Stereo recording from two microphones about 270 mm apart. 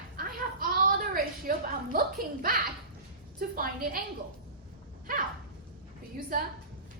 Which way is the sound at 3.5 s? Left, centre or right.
Right.